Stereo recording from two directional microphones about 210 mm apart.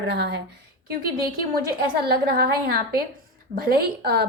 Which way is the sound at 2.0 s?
50° right (ahead or behind).